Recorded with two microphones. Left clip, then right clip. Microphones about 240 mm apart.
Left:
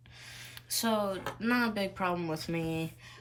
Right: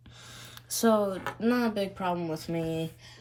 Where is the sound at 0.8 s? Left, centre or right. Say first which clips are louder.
Right 6 dB; centre.